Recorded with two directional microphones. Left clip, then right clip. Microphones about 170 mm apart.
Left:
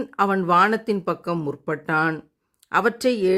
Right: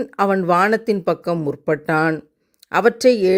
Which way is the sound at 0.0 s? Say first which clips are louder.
Right 3 dB; 25° right (ahead or behind).